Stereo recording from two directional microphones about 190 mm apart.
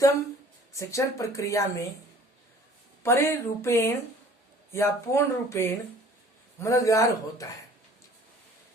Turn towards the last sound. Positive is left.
turn(degrees=15)  # may be behind; listen again after turning